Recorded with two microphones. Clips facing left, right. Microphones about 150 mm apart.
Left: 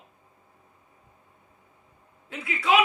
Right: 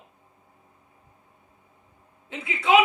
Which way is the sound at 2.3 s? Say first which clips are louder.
Right 3 dB; 25° right (ahead or behind).